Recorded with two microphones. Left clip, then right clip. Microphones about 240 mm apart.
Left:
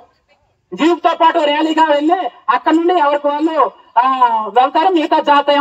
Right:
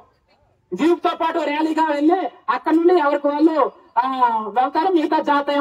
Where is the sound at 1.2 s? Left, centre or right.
Left.